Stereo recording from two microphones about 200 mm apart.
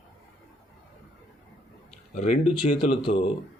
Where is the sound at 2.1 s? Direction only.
30° left (ahead or behind).